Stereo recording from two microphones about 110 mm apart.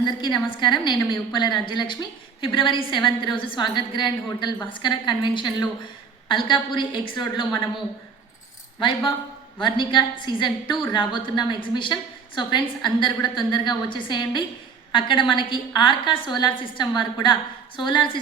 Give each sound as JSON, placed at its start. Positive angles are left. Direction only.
{"t": 0.0, "sound": "a woman's voice", "side_deg": 45}
{"t": 9.6, "sound": "a woman's voice", "side_deg": 45}